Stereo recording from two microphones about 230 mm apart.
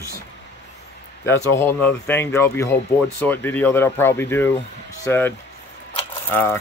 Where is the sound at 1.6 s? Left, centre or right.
Centre.